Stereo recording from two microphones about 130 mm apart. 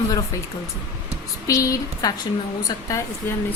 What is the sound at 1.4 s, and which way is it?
A woman's voice, 25° left (ahead or behind).